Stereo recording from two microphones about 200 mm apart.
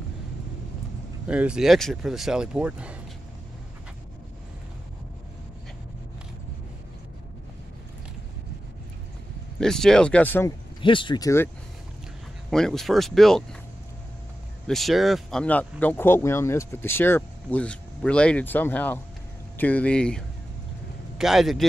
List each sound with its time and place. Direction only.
1.2 s speech: 5° right (ahead or behind)
9.6 s speech: 5° left (ahead or behind)
10.8 s speech: 25° left (ahead or behind)
12.4 s speech: centre (ahead or behind)
14.7 s speech: centre (ahead or behind)